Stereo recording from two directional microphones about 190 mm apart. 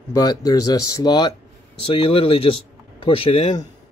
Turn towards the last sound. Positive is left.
turn(degrees=30)  # may be behind; listen again after turning